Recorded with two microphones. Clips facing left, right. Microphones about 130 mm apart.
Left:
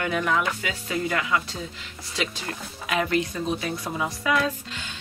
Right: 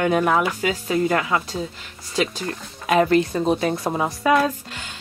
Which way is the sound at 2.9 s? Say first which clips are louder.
Right 8 dB; 40° right (ahead or behind).